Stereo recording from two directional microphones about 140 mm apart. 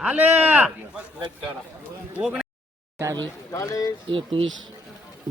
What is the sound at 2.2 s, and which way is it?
Speech, 5° right (ahead or behind).